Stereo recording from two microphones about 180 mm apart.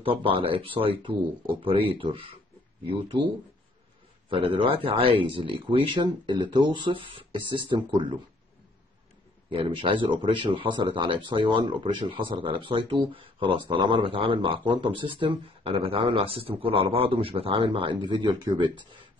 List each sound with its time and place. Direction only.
0.0 s speech: 30° right (ahead or behind)
4.3 s speech: 30° right (ahead or behind)
9.5 s speech: 30° right (ahead or behind)